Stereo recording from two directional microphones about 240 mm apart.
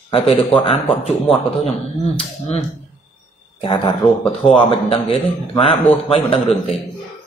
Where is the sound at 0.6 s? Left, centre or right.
Left.